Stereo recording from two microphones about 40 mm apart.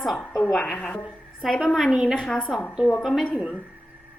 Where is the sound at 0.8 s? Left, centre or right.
Left.